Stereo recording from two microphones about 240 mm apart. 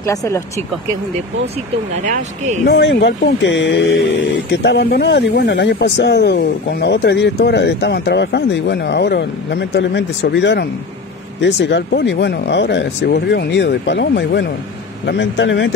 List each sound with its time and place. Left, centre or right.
0.0 s speech: centre
2.0 s speech: right
2.6 s speech: left